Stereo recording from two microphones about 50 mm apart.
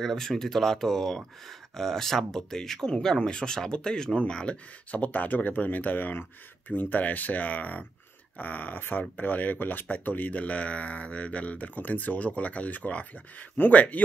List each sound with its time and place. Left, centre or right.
0.0 s speech: centre
4.9 s speech: left